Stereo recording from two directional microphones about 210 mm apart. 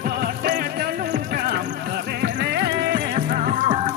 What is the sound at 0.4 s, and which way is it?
Music, 45° right (ahead or behind).